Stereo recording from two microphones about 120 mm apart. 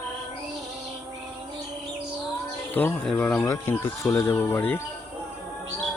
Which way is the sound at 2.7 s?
15° left (ahead or behind).